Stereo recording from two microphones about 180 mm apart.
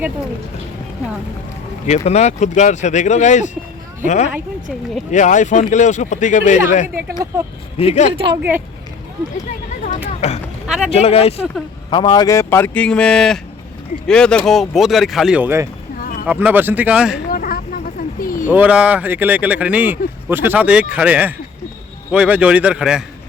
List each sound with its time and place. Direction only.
2.0 s speech: 40° left (ahead or behind)
6.8 s speech: 10° right (ahead or behind)
7.8 s speech: 35° left (ahead or behind)
8.1 s speech: 30° right (ahead or behind)
8.4 s speech: 10° right (ahead or behind)
9.8 s a sound: 40° left (ahead or behind)
10.7 s vehicle: centre (ahead or behind)
10.9 s speech: 35° left (ahead or behind); by 15.7 s 15° right (ahead or behind)
16.0 s a sound: 50° left (ahead or behind)
16.2 s speech: 10° right (ahead or behind)
17.3 s vehicle: 55° left (ahead or behind)
18.2 s a sound: 50° left (ahead or behind)
18.5 s speech: 5° right (ahead or behind)